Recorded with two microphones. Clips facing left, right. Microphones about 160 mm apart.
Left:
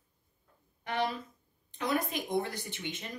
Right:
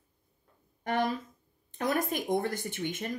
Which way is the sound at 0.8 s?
45° right (ahead or behind).